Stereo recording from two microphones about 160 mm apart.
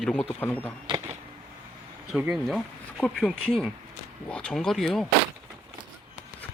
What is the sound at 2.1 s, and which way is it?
Speech, 5° right (ahead or behind).